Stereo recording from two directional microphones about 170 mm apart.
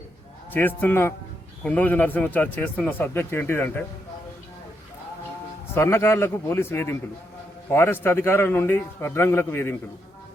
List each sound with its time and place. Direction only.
0.5 s a man's voice: 10° left (ahead or behind)
5.7 s a man's voice: 15° left (ahead or behind)